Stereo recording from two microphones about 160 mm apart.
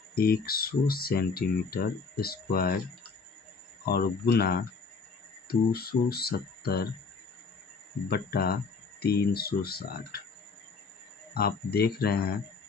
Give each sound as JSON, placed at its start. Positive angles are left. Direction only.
{"t": 0.1, "sound": "speech", "side_deg": 70}
{"t": 3.8, "sound": "speech", "side_deg": 75}
{"t": 8.1, "sound": "speech", "side_deg": 75}
{"t": 11.3, "sound": "speech", "side_deg": 75}